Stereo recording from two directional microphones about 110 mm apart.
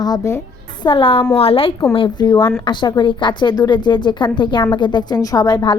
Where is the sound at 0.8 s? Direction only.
50° left (ahead or behind).